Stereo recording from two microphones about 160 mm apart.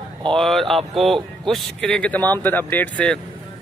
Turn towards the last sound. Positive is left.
turn(degrees=10)  # may be behind; listen again after turning